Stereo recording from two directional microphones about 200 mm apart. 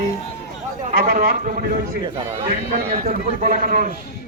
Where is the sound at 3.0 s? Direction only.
45° right (ahead or behind).